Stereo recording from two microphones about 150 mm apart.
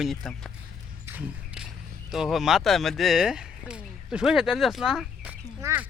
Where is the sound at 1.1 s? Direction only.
10° right (ahead or behind).